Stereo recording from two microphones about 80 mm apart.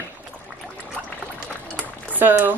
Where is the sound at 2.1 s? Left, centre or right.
Right.